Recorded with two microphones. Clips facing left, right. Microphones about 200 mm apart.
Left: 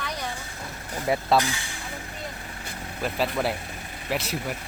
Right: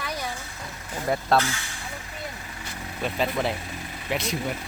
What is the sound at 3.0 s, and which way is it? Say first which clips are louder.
Speech: even; 5° left (ahead or behind).